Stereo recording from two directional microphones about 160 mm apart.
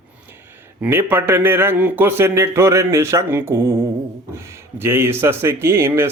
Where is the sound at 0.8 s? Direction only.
15° right (ahead or behind).